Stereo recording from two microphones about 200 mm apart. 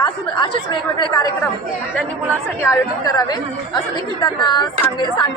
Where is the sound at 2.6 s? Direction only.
15° left (ahead or behind).